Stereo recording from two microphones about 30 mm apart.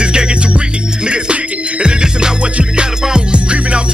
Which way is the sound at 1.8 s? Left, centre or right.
Right.